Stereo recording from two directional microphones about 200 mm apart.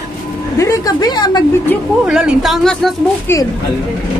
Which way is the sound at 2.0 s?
5° right (ahead or behind).